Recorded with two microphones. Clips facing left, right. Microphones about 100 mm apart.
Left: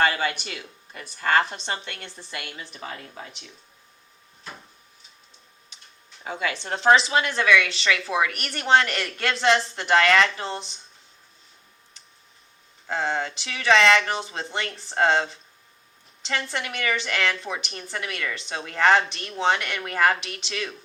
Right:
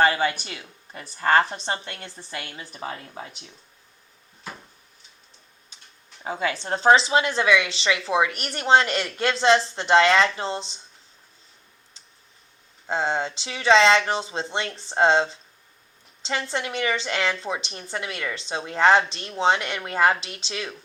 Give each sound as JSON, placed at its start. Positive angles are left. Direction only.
{"t": 0.0, "sound": "a woman's voice", "side_deg": -30}
{"t": 6.2, "sound": "a woman's voice", "side_deg": -30}
{"t": 12.9, "sound": "a woman's voice", "side_deg": -25}